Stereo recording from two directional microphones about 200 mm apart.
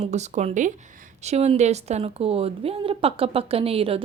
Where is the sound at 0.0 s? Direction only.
35° right (ahead or behind).